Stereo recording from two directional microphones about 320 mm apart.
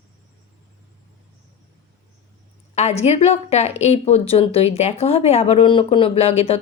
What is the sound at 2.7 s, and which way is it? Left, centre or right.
Speech, centre.